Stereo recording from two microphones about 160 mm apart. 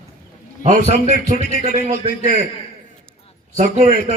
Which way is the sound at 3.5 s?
50° right (ahead or behind).